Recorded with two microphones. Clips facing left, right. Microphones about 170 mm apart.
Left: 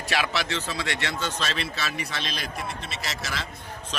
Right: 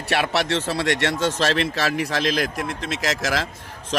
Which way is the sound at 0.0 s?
65° right (ahead or behind).